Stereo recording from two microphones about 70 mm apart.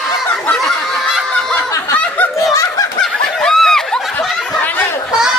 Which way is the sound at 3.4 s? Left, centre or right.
Centre.